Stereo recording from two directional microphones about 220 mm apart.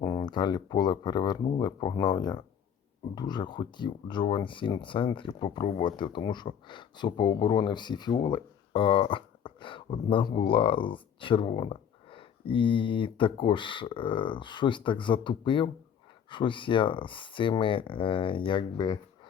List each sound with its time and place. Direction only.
0.0 s speech: 20° left (ahead or behind)